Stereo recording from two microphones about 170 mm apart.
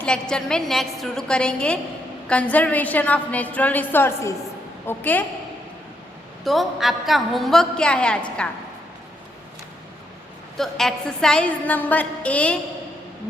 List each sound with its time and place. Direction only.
0.0 s a woman's voice: 5° left (ahead or behind)
6.4 s a woman's voice: centre (ahead or behind)
10.6 s a woman's voice: centre (ahead or behind)